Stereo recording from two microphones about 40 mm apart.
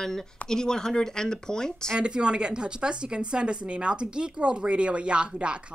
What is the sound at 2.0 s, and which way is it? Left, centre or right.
Speech, right.